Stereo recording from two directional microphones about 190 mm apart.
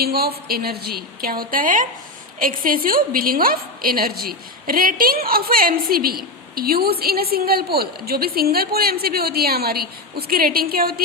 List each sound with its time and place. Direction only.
0.0 s a woman's voice: 55° right (ahead or behind)